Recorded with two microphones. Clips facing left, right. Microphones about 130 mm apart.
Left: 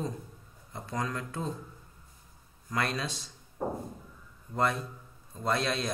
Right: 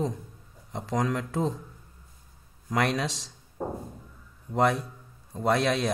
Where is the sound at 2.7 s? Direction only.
75° right (ahead or behind).